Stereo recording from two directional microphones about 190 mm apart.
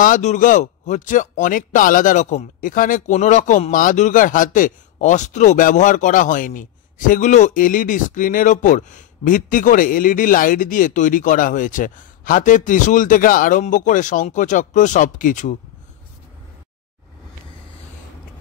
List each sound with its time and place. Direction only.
0.0 s speech: 40° left (ahead or behind)